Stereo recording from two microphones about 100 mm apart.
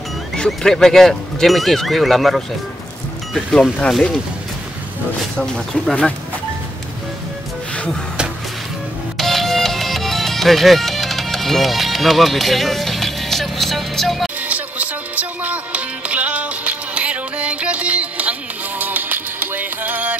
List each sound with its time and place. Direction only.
0.4 s speech: 5° left (ahead or behind)
5.4 s speech: 5° left (ahead or behind)
7.7 s music: 10° left (ahead or behind)
9.1 s music: centre (ahead or behind)
14.5 s music: 15° right (ahead or behind)